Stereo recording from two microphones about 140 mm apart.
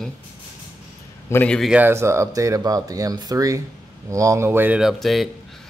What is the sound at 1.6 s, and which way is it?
Speech, 10° right (ahead or behind).